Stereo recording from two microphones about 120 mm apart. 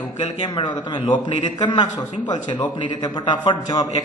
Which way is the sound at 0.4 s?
35° left (ahead or behind).